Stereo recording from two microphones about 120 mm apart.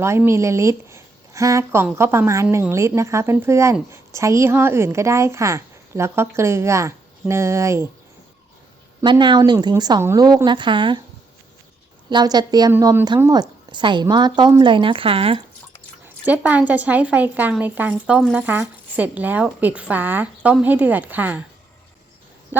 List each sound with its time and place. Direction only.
0.0 s a woman's voice: 20° right (ahead or behind)
9.0 s speech: 40° right (ahead or behind)
12.0 s speech: 35° right (ahead or behind)
12.8 s a woman's voice: 20° right (ahead or behind)
13.3 s speech: 40° right (ahead or behind)
16.2 s speech: 10° right (ahead or behind)